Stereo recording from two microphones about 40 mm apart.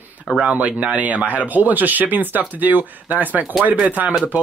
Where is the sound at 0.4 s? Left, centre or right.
Right.